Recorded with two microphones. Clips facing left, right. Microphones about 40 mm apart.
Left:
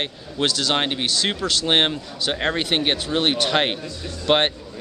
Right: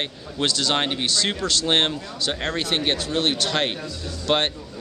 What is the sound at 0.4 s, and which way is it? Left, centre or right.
Speech, centre.